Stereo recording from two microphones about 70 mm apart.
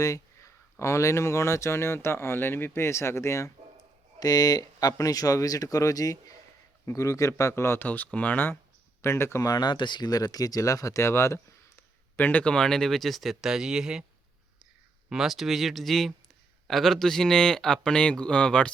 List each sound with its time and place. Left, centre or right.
0.0 s speech: left
4.2 s speech: left
6.8 s speech: left
7.9 s speech: left
9.0 s speech: left
9.4 s speech: left
11.8 s speech: left; by 14.0 s centre
15.1 s a man's voice: centre